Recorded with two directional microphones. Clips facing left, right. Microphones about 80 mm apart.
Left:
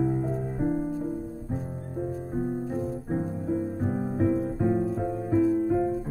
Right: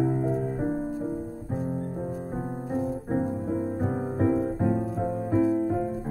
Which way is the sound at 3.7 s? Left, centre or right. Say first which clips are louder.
Right 1 dB; right.